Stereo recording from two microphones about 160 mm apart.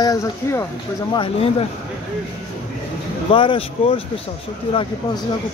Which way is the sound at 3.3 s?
30° left (ahead or behind).